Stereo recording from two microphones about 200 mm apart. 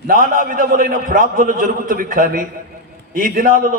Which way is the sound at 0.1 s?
45° right (ahead or behind).